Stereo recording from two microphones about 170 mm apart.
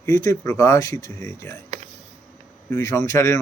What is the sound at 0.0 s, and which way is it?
Speech, 20° left (ahead or behind).